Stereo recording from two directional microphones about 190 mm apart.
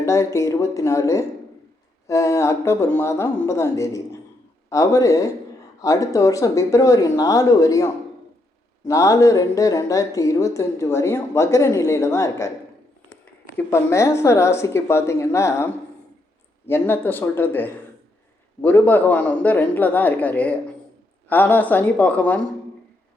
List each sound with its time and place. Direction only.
0.0 s a woman's voice: 15° left (ahead or behind)
8.9 s a woman's voice: 15° left (ahead or behind)
13.6 s a woman's voice: 15° left (ahead or behind)